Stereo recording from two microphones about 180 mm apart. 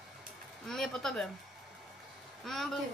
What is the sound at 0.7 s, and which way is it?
Speech, centre (ahead or behind).